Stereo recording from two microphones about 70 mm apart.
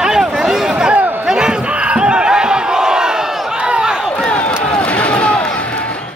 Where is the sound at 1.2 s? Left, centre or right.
Centre.